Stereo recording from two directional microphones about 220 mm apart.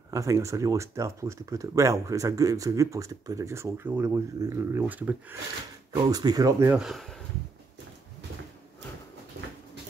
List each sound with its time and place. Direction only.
0.1 s speech: 15° right (ahead or behind)
6.8 s speech: centre (ahead or behind)